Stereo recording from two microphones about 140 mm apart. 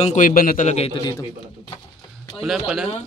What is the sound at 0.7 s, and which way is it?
Speech, 45° left (ahead or behind).